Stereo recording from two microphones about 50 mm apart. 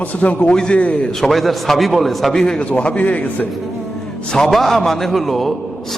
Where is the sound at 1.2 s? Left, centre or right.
Centre.